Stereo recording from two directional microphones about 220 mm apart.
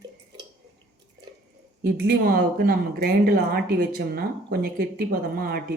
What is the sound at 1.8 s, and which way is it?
Speech, 45° right (ahead or behind).